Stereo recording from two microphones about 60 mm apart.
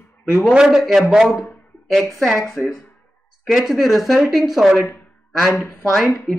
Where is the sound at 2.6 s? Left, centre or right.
Centre.